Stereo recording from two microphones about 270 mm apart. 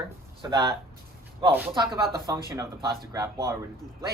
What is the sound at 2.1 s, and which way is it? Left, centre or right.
Speech, centre.